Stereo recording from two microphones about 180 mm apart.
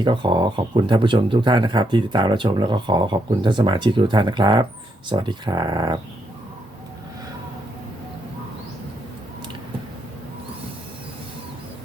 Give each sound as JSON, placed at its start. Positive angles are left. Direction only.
{"t": 0.0, "sound": "speech", "side_deg": -25}